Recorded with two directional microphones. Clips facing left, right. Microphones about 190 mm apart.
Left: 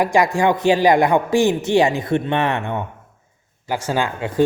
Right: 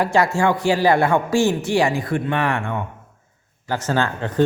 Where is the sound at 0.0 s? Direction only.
15° left (ahead or behind).